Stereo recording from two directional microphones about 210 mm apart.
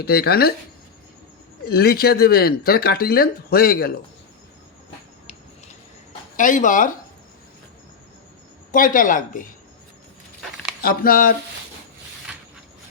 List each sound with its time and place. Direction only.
0.0 s speech: 50° left (ahead or behind)
1.7 s speech: 50° left (ahead or behind)
6.3 s speech: 40° left (ahead or behind)
8.7 s speech: 40° left (ahead or behind)
10.8 s speech: 45° left (ahead or behind)